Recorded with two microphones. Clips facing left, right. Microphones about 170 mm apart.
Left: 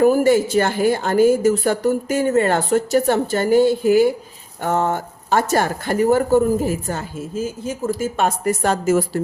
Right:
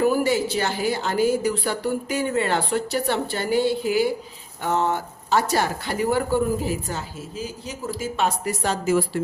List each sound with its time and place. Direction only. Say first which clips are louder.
0.0 s speech: left 6 dB; 45° left (ahead or behind)